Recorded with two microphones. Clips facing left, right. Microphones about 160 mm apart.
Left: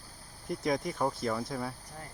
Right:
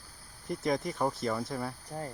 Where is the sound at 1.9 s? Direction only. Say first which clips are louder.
Right 8 dB; 40° right (ahead or behind).